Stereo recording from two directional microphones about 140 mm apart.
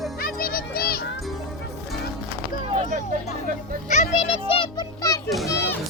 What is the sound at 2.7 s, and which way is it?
Speech, 55° right (ahead or behind).